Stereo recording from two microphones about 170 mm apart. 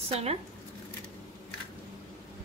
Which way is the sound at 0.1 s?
40° right (ahead or behind).